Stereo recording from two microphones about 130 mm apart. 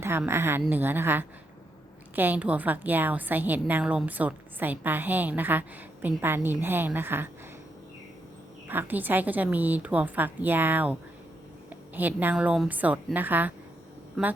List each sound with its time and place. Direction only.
0.0 s a woman's voice: 20° right (ahead or behind)
8.6 s a woman's voice: 15° right (ahead or behind)